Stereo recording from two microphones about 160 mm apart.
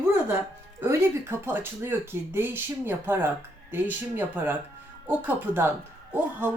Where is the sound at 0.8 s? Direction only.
15° right (ahead or behind).